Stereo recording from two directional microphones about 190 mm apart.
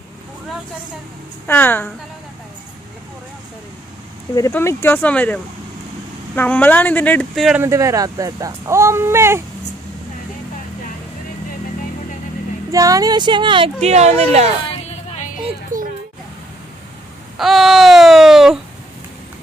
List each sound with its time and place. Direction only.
1.5 s speech: 10° left (ahead or behind)
4.4 s speech: 15° left (ahead or behind); by 7.6 s centre (ahead or behind)
7.6 s speech: 15° right (ahead or behind)
12.7 s speech: 20° right (ahead or behind); by 14.1 s 35° right (ahead or behind)
14.7 s a sound: 35° left (ahead or behind)
15.7 s a sound: 45° right (ahead or behind)
17.3 s babbling: centre (ahead or behind)